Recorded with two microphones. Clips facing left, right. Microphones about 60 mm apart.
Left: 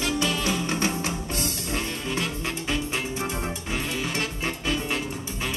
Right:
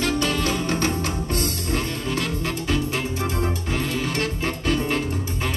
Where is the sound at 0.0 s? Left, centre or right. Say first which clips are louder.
Right 3 dB; right.